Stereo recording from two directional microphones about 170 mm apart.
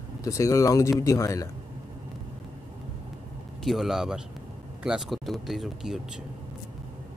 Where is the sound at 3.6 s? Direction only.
Centre (ahead or behind).